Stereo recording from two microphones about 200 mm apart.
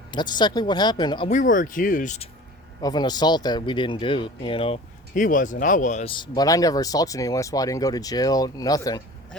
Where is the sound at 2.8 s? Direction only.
20° left (ahead or behind).